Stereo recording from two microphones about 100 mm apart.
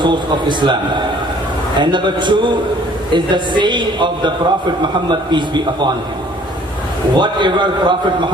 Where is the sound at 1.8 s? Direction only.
50° right (ahead or behind).